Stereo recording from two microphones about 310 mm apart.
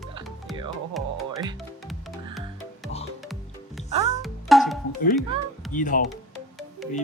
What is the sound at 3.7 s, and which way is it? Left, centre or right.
Music, centre.